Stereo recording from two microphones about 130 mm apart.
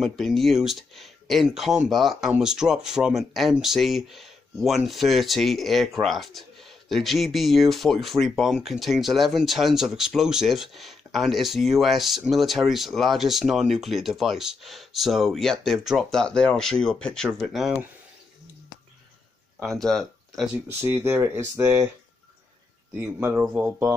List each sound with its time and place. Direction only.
0.0 s speech: centre (ahead or behind)
19.8 s speech: 5° left (ahead or behind)
20.6 s speech: 20° right (ahead or behind)
22.9 s speech: 15° right (ahead or behind)